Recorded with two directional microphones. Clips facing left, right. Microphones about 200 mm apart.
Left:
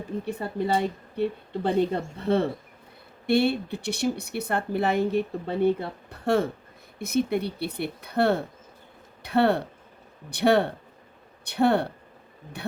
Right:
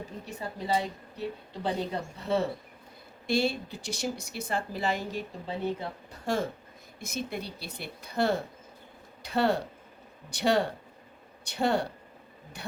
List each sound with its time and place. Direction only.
0.3 s speech: 55° left (ahead or behind)